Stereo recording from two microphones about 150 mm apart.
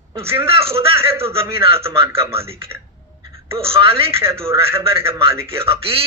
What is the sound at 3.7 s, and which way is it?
Speech, 40° right (ahead or behind).